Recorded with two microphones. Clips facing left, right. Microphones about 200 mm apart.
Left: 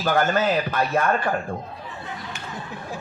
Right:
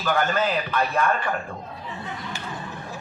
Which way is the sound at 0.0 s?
45° left (ahead or behind).